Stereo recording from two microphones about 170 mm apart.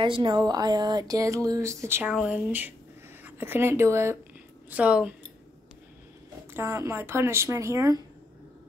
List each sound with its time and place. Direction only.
0.0 s speech: 30° right (ahead or behind); by 5.1 s 5° right (ahead or behind)
6.5 s speech: 15° right (ahead or behind)